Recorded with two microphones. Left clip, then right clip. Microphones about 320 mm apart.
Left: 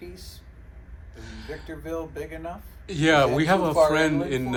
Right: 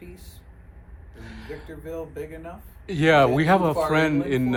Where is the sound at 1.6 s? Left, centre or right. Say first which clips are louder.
Left 3 dB; centre.